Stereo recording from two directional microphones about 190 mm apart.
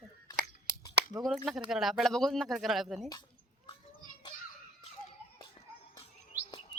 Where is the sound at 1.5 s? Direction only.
Centre (ahead or behind).